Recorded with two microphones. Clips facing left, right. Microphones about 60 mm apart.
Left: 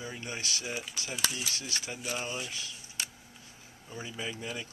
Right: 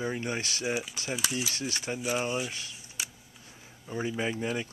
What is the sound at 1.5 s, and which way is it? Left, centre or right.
Speech, right.